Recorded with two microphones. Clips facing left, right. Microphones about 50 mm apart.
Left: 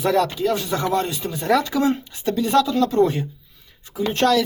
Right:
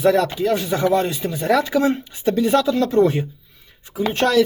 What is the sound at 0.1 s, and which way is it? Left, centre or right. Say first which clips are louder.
Speech: right 2 dB; centre.